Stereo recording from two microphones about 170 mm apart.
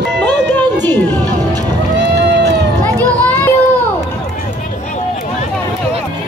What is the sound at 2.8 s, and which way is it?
Children playing, 10° left (ahead or behind).